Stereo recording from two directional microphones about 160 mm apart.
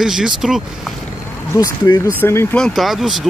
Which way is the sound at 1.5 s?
25° left (ahead or behind).